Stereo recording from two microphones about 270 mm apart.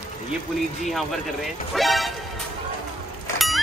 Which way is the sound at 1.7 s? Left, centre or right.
Centre.